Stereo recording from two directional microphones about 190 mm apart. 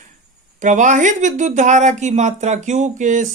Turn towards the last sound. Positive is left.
turn(degrees=-40)  # may be behind; listen again after turning